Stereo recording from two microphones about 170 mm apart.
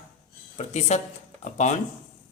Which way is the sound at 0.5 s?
40° left (ahead or behind).